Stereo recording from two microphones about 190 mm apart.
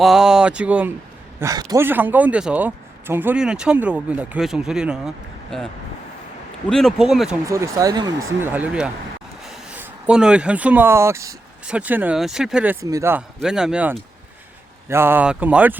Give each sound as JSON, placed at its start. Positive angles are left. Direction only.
{"t": 0.0, "sound": "speech", "side_deg": 0}
{"t": 6.7, "sound": "speech", "side_deg": 0}
{"t": 7.4, "sound": "speech", "side_deg": -15}
{"t": 12.8, "sound": "speech", "side_deg": -15}